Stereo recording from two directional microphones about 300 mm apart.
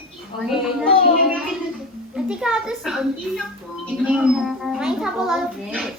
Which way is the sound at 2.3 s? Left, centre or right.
Centre.